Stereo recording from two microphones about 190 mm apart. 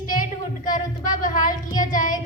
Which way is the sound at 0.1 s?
45° left (ahead or behind).